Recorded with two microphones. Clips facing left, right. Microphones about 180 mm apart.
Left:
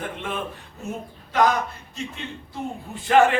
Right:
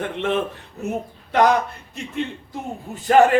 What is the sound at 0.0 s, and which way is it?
Speech, 70° right (ahead or behind).